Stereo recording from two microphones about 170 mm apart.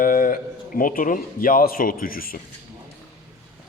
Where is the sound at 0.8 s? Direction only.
55° left (ahead or behind).